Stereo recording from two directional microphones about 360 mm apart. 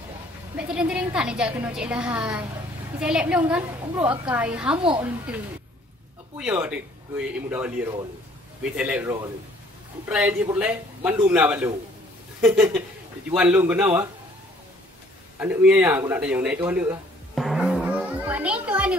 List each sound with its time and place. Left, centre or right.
0.6 s a woman's voice: centre
4.8 s a woman's voice: centre
6.3 s a woman's voice: centre
15.3 s a man's voice: centre